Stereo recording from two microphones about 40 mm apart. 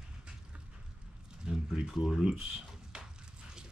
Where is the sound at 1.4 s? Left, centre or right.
Centre.